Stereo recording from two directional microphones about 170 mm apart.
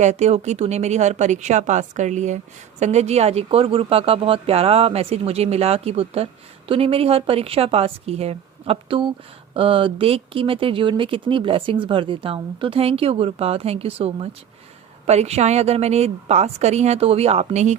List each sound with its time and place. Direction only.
0.0 s a woman's voice: 40° right (ahead or behind)